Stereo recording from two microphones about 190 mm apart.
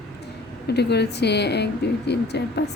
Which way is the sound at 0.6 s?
60° left (ahead or behind).